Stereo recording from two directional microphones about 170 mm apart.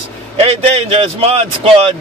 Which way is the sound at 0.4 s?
35° right (ahead or behind).